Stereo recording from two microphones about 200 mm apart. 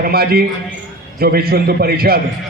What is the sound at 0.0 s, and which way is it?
A man's voice, 50° right (ahead or behind).